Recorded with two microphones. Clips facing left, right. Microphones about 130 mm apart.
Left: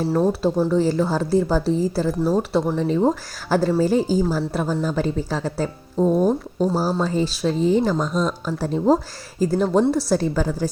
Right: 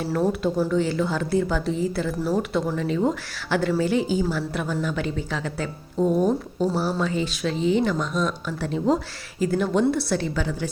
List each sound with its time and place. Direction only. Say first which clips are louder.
0.1 s speech: left 1 dB; 25° left (ahead or behind)